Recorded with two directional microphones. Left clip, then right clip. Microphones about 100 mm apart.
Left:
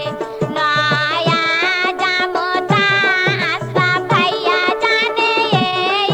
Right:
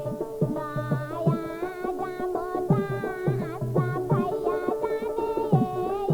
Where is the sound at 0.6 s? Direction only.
10° right (ahead or behind).